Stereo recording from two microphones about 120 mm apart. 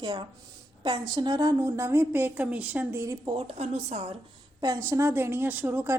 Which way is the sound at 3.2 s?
50° right (ahead or behind).